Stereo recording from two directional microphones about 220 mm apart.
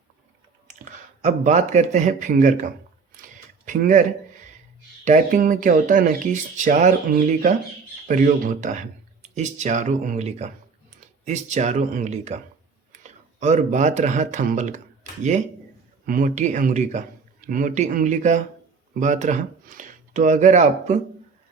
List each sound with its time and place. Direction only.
0.7 s speech: 30° right (ahead or behind)
3.7 s speech: 35° right (ahead or behind)
5.0 s speech: 35° right (ahead or behind)